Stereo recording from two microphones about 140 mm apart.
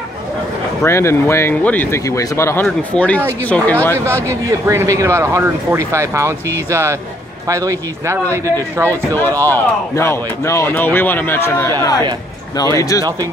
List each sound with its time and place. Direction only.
0.8 s speech: 20° left (ahead or behind)
4.3 s speech: 20° right (ahead or behind)
9.1 s speech: 15° left (ahead or behind)